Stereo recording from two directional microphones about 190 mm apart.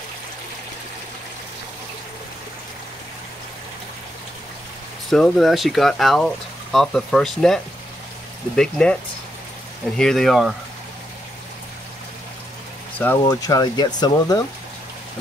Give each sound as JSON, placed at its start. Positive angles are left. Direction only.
{"t": 5.1, "sound": "speech", "side_deg": 0}
{"t": 9.9, "sound": "speech", "side_deg": 5}
{"t": 12.9, "sound": "speech", "side_deg": 10}
{"t": 13.2, "sound": "speech", "side_deg": 20}